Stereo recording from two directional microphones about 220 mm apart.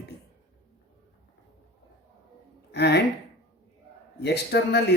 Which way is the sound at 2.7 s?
50° left (ahead or behind).